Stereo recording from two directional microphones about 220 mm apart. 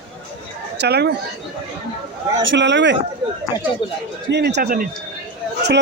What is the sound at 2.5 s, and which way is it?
Speech, 55° right (ahead or behind).